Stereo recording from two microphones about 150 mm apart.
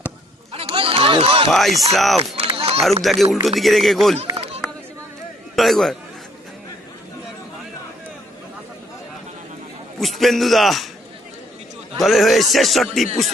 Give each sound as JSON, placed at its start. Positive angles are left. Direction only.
{"t": 0.5, "sound": "a sound", "side_deg": -40}
{"t": 1.5, "sound": "a man's voice", "side_deg": 0}
{"t": 2.4, "sound": "run", "side_deg": -40}
{"t": 3.0, "sound": "a man's voice", "side_deg": 0}
{"t": 4.6, "sound": "a sound", "side_deg": 0}
{"t": 5.5, "sound": "a man's voice", "side_deg": 0}
{"t": 10.0, "sound": "a man's voice", "side_deg": 0}
{"t": 11.9, "sound": "a man's voice", "side_deg": 0}